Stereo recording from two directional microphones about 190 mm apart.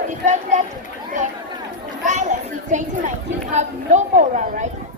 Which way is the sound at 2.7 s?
40° right (ahead or behind).